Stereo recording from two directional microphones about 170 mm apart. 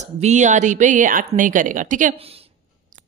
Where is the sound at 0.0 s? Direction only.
45° right (ahead or behind).